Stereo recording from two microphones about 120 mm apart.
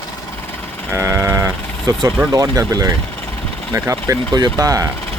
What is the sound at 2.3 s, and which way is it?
Speech, 30° right (ahead or behind).